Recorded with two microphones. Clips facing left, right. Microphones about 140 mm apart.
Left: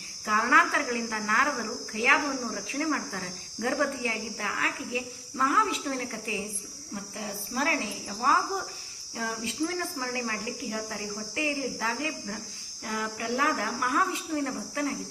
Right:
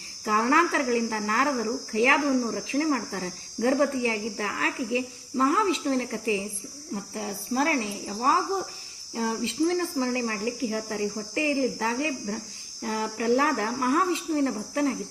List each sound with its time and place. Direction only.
0.3 s speech: 30° right (ahead or behind)
7.2 s speech: 35° right (ahead or behind)